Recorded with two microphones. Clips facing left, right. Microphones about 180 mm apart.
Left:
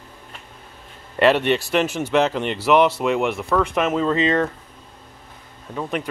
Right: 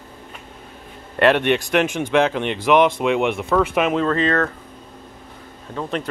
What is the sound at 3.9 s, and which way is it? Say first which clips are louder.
Speech: even; 15° left (ahead or behind).